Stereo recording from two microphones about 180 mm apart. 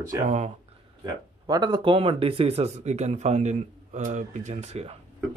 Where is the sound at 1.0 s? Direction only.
20° right (ahead or behind).